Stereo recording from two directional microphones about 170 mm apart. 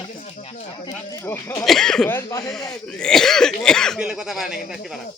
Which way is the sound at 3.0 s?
5° left (ahead or behind).